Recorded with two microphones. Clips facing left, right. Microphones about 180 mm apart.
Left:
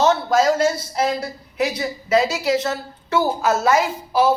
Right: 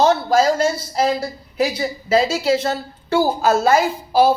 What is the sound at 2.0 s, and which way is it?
A woman's voice, 30° right (ahead or behind).